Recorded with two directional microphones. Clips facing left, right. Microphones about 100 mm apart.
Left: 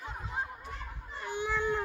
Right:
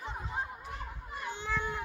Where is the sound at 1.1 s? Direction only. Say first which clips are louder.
Left 3 dB; 15° left (ahead or behind).